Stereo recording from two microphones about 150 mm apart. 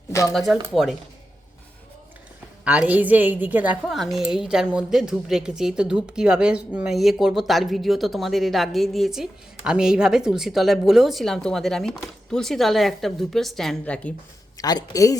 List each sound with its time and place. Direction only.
0.1 s a sound: 20° left (ahead or behind)
0.3 s a woman's voice: centre (ahead or behind)
2.6 s a woman's voice: 10° right (ahead or behind); by 14.1 s 10° left (ahead or behind)
14.6 s speech: 25° left (ahead or behind)